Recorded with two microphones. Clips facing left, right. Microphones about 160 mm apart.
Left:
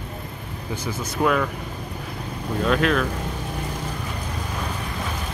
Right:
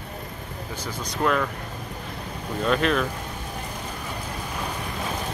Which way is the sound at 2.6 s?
Centre (ahead or behind).